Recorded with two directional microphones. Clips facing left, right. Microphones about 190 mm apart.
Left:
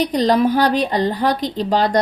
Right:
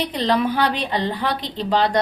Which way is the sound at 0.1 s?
40° left (ahead or behind).